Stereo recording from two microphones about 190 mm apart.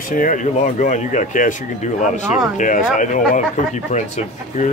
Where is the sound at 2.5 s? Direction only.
45° left (ahead or behind).